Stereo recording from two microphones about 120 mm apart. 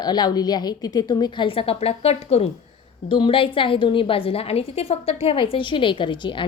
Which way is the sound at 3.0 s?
45° left (ahead or behind).